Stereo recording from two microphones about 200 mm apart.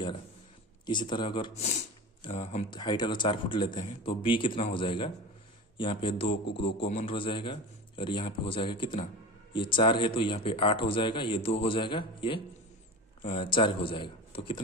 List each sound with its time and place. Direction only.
0.8 s speech: 25° left (ahead or behind)
2.7 s speech: 20° left (ahead or behind)